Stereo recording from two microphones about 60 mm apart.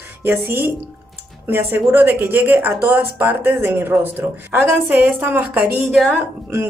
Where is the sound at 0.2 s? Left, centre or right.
Right.